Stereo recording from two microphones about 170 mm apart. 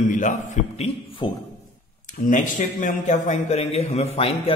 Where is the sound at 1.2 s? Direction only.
30° left (ahead or behind).